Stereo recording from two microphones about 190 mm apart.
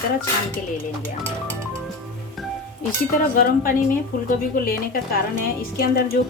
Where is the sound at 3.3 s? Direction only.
50° left (ahead or behind).